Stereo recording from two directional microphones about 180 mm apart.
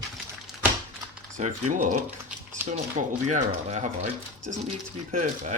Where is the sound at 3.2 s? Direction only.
40° right (ahead or behind).